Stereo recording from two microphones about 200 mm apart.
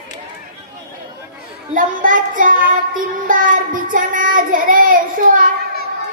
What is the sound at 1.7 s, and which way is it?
Speech, 40° right (ahead or behind).